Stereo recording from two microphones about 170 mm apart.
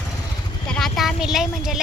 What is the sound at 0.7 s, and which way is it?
A woman's voice, centre (ahead or behind).